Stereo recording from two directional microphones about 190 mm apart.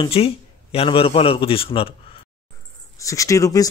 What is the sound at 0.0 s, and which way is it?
Speech, 30° left (ahead or behind).